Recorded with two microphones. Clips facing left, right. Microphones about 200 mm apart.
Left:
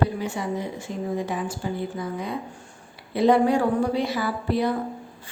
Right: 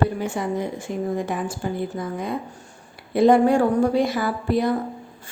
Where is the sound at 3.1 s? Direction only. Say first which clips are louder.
Right 3 dB; 50° right (ahead or behind).